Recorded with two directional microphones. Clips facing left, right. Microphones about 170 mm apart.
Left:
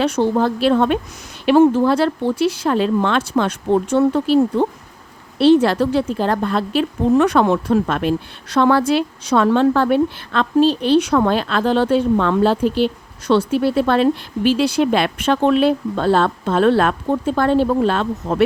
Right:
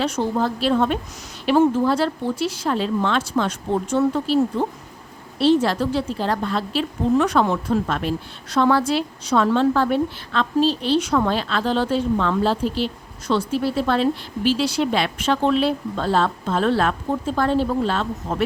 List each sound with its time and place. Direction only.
0.0 s a woman's voice: 65° left (ahead or behind)